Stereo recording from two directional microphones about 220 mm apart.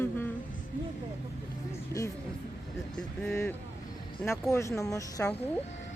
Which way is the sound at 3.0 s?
5° left (ahead or behind).